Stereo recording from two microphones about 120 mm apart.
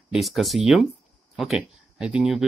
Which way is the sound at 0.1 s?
Centre (ahead or behind).